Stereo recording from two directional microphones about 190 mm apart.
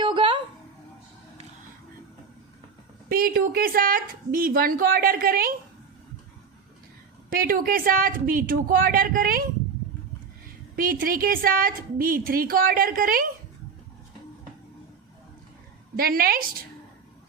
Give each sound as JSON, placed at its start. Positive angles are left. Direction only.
{"t": 0.0, "sound": "a sound", "side_deg": -25}
{"t": 3.1, "sound": "a woman's voice", "side_deg": -50}
{"t": 7.3, "sound": "a woman's voice", "side_deg": -50}
{"t": 10.8, "sound": "a woman's voice", "side_deg": -50}
{"t": 16.0, "sound": "a woman's voice", "side_deg": -50}